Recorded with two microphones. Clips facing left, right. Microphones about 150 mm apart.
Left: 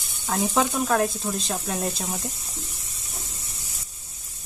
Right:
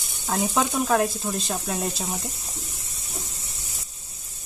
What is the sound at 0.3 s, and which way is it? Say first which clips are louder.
Speech: left 1 dB; centre (ahead or behind).